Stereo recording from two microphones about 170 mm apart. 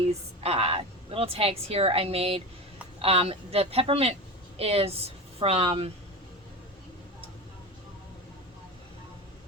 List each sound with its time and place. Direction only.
0.1 s a woman's voice: 40° right (ahead or behind)